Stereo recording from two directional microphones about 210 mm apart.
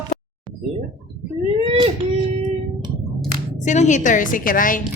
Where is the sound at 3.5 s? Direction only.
35° left (ahead or behind).